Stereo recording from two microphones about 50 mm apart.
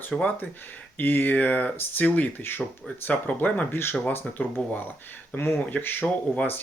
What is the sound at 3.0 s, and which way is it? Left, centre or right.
Speech, left.